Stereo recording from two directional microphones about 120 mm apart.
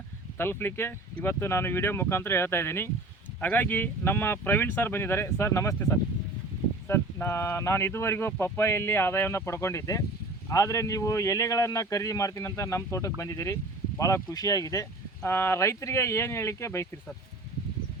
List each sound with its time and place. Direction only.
0.3 s speech: 20° left (ahead or behind)